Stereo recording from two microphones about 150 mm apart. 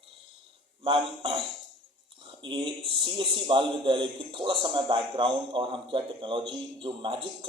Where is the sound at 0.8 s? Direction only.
35° right (ahead or behind).